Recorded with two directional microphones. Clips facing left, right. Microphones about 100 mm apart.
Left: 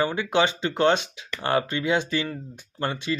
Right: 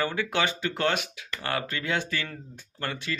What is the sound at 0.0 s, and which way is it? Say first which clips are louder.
Speech: left 5 dB; 20° left (ahead or behind).